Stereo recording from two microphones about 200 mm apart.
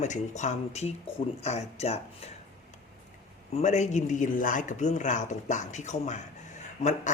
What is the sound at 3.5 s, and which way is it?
Speech, 35° left (ahead or behind).